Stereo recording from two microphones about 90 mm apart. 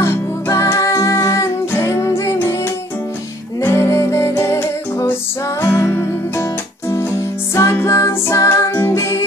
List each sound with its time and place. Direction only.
0.0 s music: 35° left (ahead or behind)
3.6 s music: 30° left (ahead or behind)
7.5 s music: 30° left (ahead or behind)